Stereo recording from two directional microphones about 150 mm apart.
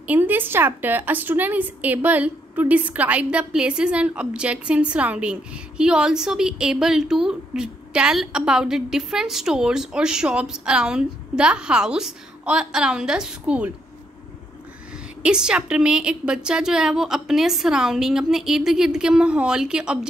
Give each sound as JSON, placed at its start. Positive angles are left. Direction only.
{"t": 0.0, "sound": "a woman's voice", "side_deg": -10}
{"t": 15.2, "sound": "a woman's voice", "side_deg": -5}